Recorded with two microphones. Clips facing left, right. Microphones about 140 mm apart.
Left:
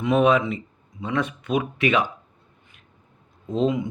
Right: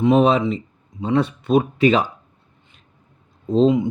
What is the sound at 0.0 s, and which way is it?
Speech, 30° right (ahead or behind).